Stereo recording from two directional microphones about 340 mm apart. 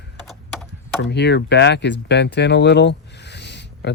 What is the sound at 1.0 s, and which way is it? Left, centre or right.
Speech, left.